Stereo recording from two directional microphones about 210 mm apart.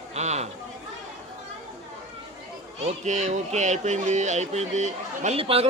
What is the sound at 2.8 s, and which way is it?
Speech, 35° right (ahead or behind).